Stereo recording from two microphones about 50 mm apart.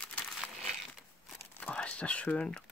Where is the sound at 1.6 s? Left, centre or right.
Left.